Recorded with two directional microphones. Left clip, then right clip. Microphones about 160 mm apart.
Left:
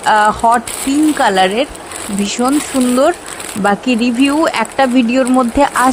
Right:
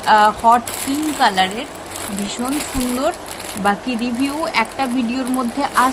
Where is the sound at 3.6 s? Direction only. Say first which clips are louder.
Left 6 dB; 45° left (ahead or behind).